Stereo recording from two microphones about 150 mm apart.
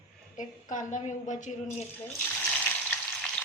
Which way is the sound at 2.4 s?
10° left (ahead or behind).